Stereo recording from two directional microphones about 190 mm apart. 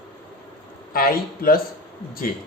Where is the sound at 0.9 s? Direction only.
50° left (ahead or behind).